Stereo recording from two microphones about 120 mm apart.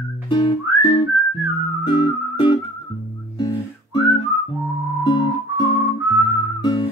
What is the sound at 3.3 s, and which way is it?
Guitar, 40° left (ahead or behind).